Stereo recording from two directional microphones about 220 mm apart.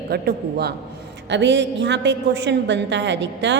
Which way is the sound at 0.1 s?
45° right (ahead or behind).